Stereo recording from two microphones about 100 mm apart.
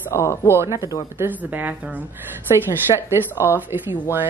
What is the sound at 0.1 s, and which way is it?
Speech, 30° left (ahead or behind).